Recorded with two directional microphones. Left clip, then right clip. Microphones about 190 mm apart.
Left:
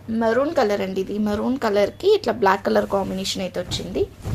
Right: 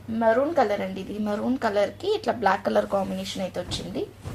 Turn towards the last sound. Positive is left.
turn(degrees=40)  # may be behind; listen again after turning